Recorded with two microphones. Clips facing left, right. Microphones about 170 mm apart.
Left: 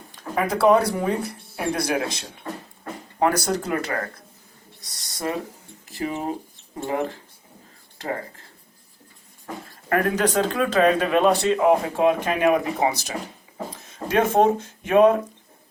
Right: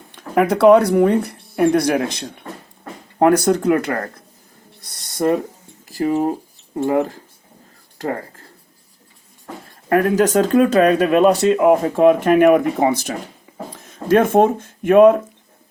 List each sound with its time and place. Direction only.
0.3 s speech: 65° right (ahead or behind)
4.8 s owl: 55° right (ahead or behind)
5.9 s speech: 40° right (ahead or behind)
9.9 s speech: 40° right (ahead or behind)
14.2 s speech: 55° right (ahead or behind)